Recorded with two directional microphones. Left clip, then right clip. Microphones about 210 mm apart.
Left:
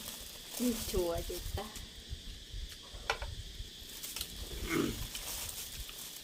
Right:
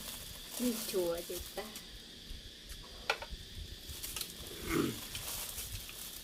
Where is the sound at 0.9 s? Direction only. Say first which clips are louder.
Even; 25° left (ahead or behind).